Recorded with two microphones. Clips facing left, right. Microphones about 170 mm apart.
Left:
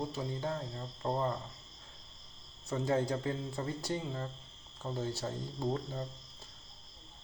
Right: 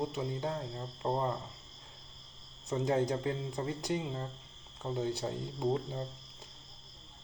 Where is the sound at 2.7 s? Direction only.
20° right (ahead or behind).